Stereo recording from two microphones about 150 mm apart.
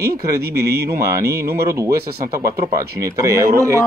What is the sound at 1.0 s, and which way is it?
Speech, 20° right (ahead or behind).